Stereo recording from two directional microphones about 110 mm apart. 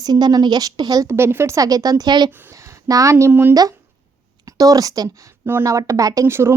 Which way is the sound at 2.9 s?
30° right (ahead or behind).